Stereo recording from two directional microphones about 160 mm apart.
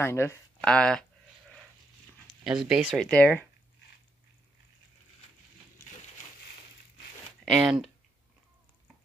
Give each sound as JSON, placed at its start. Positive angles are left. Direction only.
{"t": 0.0, "sound": "speech", "side_deg": 15}
{"t": 0.7, "sound": "speech", "side_deg": 5}
{"t": 2.4, "sound": "speech", "side_deg": -5}
{"t": 3.1, "sound": "speech", "side_deg": 10}
{"t": 7.4, "sound": "speech", "side_deg": -5}